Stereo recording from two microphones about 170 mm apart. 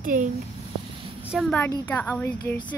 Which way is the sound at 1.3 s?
Centre (ahead or behind).